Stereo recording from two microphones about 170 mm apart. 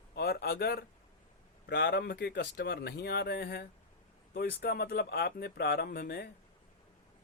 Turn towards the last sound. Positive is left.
turn(degrees=70)  # may be behind; listen again after turning